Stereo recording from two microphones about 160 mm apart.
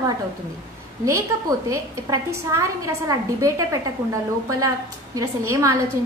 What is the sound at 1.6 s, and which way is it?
A woman's voice, 20° right (ahead or behind).